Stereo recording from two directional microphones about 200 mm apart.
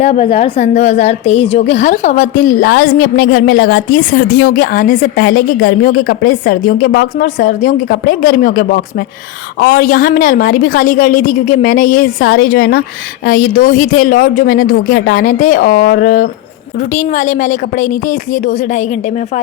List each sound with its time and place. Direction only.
0.0 s a woman's voice: 30° left (ahead or behind)